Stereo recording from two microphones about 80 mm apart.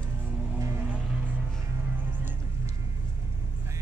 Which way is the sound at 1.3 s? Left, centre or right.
Right.